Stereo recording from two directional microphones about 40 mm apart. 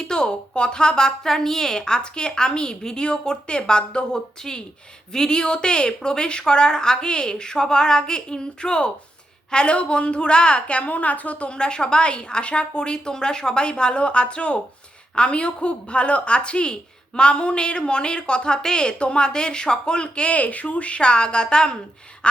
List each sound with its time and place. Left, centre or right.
0.0 s speech: centre; by 11.5 s left
11.5 s speech: left
22.2 s a sound: left